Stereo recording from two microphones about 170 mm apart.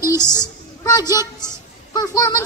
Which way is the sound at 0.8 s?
20° left (ahead or behind).